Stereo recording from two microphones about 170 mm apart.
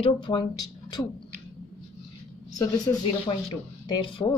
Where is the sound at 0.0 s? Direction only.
25° left (ahead or behind).